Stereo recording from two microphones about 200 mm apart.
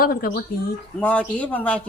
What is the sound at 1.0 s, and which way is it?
Speech, 5° left (ahead or behind).